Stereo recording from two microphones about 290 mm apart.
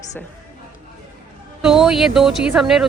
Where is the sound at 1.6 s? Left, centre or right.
Centre.